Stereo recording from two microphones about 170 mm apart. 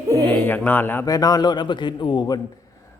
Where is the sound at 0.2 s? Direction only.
10° left (ahead or behind).